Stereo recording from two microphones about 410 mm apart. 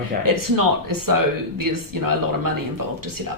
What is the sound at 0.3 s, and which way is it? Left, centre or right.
Speech, right.